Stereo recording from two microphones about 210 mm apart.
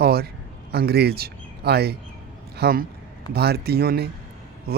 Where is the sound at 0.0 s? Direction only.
45° right (ahead or behind).